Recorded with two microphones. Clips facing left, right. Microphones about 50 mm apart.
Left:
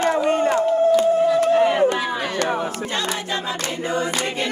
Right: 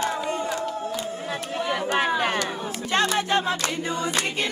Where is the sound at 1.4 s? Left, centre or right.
Left.